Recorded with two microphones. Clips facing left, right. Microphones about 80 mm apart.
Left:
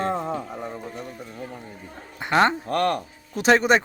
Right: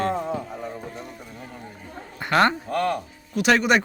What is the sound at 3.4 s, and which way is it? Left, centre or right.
Speech, left.